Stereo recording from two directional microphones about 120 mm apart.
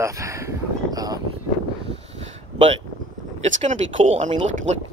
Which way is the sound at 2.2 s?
60° right (ahead or behind).